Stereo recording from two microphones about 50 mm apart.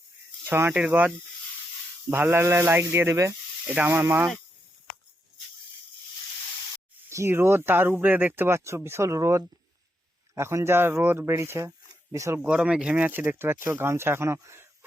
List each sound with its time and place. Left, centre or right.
0.4 s speech: right
0.7 s speech: right
2.3 s speech: right
7.3 s speech: right
8.4 s speech: right
10.3 s speech: right
11.3 s speech: right
12.1 s speech: right
12.5 s speech: centre
12.9 s speech: right